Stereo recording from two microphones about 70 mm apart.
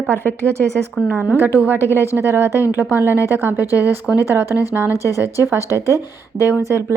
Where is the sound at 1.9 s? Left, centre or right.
Right.